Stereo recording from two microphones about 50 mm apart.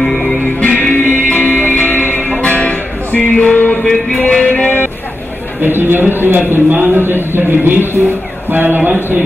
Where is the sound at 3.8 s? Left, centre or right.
Centre.